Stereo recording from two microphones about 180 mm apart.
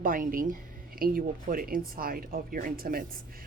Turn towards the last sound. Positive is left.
turn(degrees=-55)  # may be behind; listen again after turning